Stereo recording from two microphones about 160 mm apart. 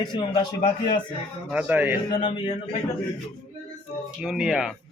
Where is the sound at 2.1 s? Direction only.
30° left (ahead or behind).